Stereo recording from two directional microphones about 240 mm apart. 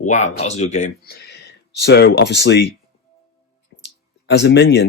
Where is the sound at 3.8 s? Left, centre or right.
Left.